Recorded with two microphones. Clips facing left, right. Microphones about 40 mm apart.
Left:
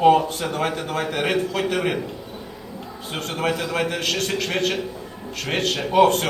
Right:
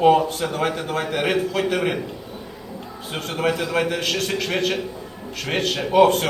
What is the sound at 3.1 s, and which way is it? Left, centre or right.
A man's voice, centre.